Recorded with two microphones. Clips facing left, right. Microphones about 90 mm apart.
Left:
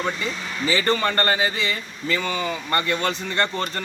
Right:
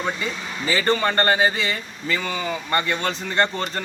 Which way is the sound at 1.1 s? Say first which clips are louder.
Right 3 dB; 25° right (ahead or behind).